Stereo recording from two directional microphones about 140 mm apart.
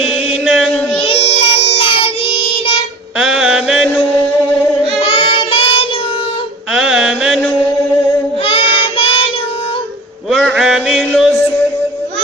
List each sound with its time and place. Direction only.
0.0 s chant: 5° right (ahead or behind)
1.0 s child singing: 40° left (ahead or behind)
3.2 s music: 5° right (ahead or behind)
4.9 s child singing: 45° left (ahead or behind)
6.7 s mantra: 5° right (ahead or behind)
8.4 s child singing: 40° left (ahead or behind)
10.2 s a sound: centre (ahead or behind)